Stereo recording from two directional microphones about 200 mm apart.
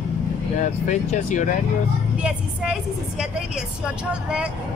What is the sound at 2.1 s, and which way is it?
A woman's voice, 5° right (ahead or behind).